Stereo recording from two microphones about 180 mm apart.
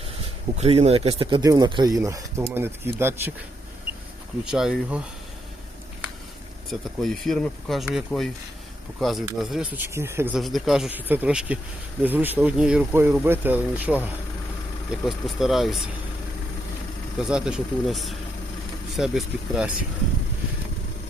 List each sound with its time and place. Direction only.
0.6 s speech: 35° right (ahead or behind); by 3.3 s 10° right (ahead or behind)
4.4 s speech: 5° right (ahead or behind)
6.7 s speech: centre (ahead or behind)
10.4 s speech: centre (ahead or behind)
17.2 s speech: 5° right (ahead or behind)